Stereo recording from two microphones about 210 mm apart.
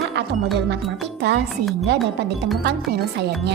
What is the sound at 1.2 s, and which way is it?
Speech, 55° right (ahead or behind).